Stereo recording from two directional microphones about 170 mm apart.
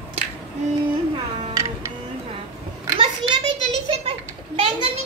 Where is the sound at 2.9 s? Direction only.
30° right (ahead or behind).